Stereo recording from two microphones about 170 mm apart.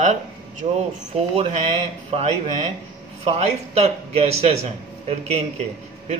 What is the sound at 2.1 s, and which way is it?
Speech, 40° right (ahead or behind).